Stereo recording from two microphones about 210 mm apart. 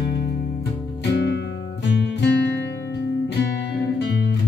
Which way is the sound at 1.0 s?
55° left (ahead or behind).